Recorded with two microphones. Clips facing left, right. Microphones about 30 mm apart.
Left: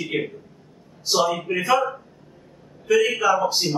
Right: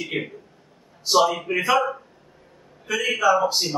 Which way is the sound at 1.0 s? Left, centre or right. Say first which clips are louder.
Right 2 dB; centre.